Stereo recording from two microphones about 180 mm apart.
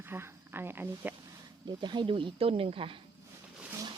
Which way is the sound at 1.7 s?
25° right (ahead or behind).